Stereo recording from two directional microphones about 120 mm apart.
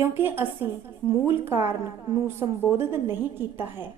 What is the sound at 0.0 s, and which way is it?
A woman's voice, 20° right (ahead or behind).